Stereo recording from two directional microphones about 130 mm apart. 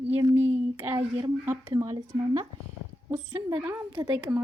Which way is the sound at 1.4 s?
25° right (ahead or behind).